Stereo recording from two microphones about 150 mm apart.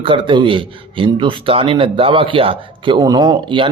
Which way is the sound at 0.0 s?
35° right (ahead or behind).